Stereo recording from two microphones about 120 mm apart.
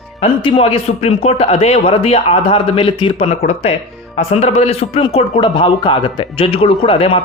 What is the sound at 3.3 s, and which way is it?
Speech, 65° left (ahead or behind).